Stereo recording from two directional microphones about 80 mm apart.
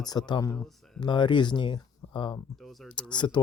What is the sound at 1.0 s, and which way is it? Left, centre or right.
Speech, left.